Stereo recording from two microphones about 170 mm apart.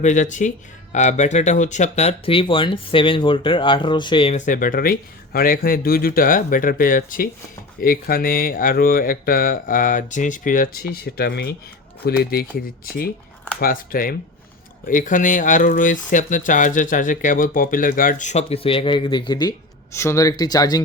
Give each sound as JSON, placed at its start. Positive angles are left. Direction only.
{"t": 0.0, "sound": "speech", "side_deg": 45}
{"t": 4.4, "sound": "speech", "side_deg": 50}